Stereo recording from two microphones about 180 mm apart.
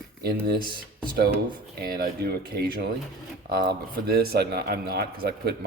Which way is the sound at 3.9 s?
55° right (ahead or behind).